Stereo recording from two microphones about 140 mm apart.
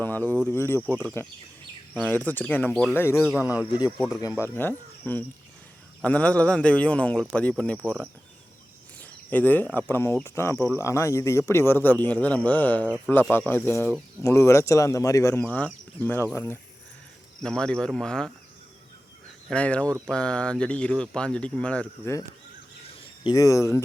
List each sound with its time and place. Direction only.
0.0 s speech: 15° left (ahead or behind)
3.3 s speech: 10° right (ahead or behind)
3.9 s speech: 5° left (ahead or behind)
6.0 s speech: 10° left (ahead or behind)
9.0 s a sound: 10° left (ahead or behind)
9.9 s speech: 20° left (ahead or behind)
17.4 s speech: 5° left (ahead or behind)
19.5 s speech: 10° left (ahead or behind)
23.2 s speech: 25° left (ahead or behind)